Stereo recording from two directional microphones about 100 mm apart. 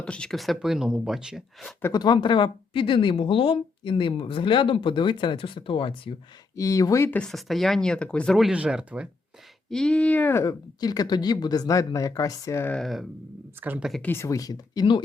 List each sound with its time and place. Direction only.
0.0 s speech: 10° left (ahead or behind)
1.9 s speech: 45° left (ahead or behind)
6.6 s speech: 35° left (ahead or behind)
7.1 s speech: 5° left (ahead or behind)
8.4 s speech: 10° right (ahead or behind)
9.6 s speech: 5° left (ahead or behind)
10.4 s speech: 40° left (ahead or behind)
12.8 s speech: centre (ahead or behind)
13.6 s speech: 20° right (ahead or behind)
14.0 s speech: 25° left (ahead or behind); by 15.0 s 50° left (ahead or behind)